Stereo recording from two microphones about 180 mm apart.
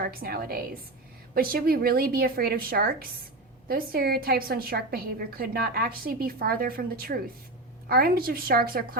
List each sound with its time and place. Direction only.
0.0 s a woman's voice: 55° right (ahead or behind)